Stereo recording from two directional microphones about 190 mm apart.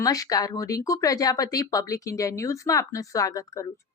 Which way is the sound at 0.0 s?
20° left (ahead or behind).